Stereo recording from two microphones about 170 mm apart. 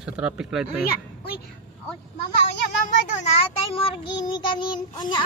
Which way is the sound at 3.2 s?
30° left (ahead or behind).